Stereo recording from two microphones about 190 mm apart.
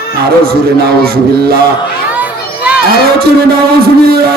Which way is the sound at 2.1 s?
5° right (ahead or behind).